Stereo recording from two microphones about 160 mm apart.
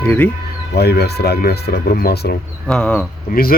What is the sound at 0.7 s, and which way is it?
Speech, 90° left.